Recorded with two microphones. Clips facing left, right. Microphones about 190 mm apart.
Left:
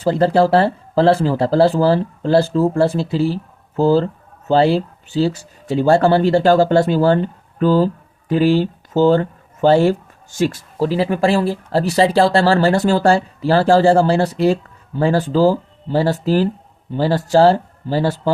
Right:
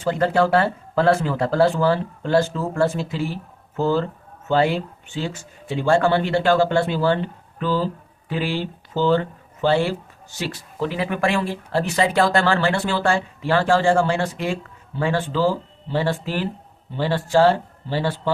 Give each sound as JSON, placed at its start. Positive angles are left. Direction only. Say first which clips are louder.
{"t": 0.0, "sound": "speech", "louder": "left 5 dB", "side_deg": 35}